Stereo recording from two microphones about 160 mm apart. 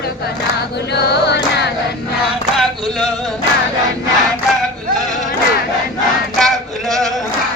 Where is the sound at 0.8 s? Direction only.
90° left.